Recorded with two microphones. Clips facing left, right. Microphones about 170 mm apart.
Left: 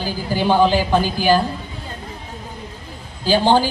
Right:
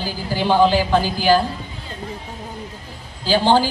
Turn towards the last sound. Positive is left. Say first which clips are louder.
# left 1 dB
turn(degrees=15)  # may be behind; listen again after turning